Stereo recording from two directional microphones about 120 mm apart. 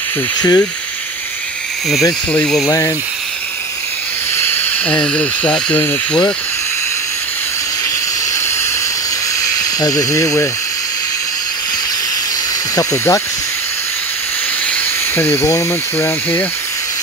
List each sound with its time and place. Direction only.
0.4 s speech: 30° left (ahead or behind)
2.3 s speech: 5° left (ahead or behind)
4.4 s hiss: 15° left (ahead or behind)
5.0 s speech: 10° left (ahead or behind)
9.4 s speech: 30° left (ahead or behind)
12.7 s speech: 25° left (ahead or behind)
14.7 s speech: 15° left (ahead or behind)